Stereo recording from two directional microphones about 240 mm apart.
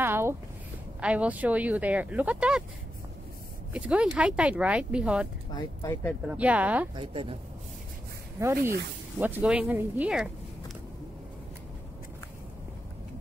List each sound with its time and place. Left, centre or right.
0.0 s a sound: centre
1.0 s speech: centre
3.7 s speech: centre
5.5 s speech: centre
6.2 s speech: centre
7.0 s speech: right
8.4 s speech: centre